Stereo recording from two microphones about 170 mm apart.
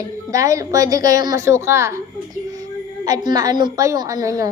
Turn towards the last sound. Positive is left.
turn(degrees=-20)  # may be behind; listen again after turning